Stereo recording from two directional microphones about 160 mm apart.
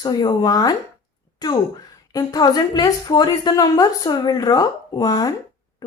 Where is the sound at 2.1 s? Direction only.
25° left (ahead or behind).